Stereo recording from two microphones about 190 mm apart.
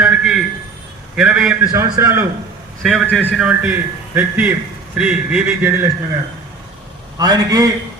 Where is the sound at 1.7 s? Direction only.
15° right (ahead or behind).